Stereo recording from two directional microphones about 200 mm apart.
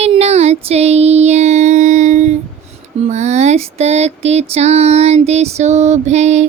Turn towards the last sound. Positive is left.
turn(degrees=-35)  # may be behind; listen again after turning